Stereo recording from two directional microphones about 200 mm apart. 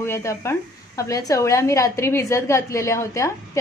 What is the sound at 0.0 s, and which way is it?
A woman's voice, 15° left (ahead or behind).